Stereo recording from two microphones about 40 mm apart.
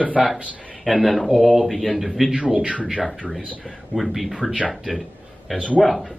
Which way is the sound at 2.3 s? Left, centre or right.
Centre.